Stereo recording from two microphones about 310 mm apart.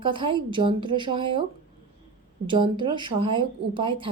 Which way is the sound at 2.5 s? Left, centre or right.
Centre.